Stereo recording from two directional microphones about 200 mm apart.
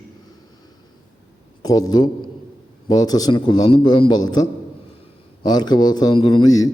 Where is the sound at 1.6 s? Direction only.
20° left (ahead or behind).